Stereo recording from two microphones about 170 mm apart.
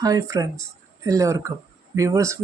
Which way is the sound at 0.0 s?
20° right (ahead or behind).